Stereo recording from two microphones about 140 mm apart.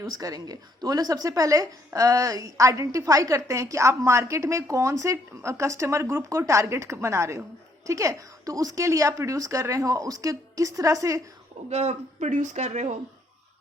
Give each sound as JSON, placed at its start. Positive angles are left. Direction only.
{"t": 0.0, "sound": "speech", "side_deg": -25}
{"t": 11.7, "sound": "speech", "side_deg": -50}